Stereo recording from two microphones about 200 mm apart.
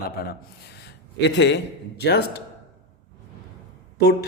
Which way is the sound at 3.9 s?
50° left (ahead or behind).